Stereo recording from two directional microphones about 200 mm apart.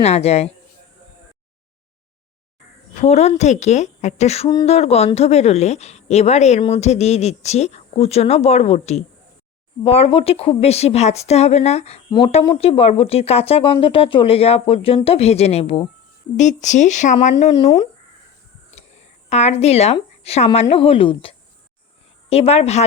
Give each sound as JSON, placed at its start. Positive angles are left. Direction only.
{"t": 0.0, "sound": "a woman's voice", "side_deg": 30}
{"t": 3.0, "sound": "a woman's voice", "side_deg": 35}
{"t": 19.3, "sound": "a woman's voice", "side_deg": 35}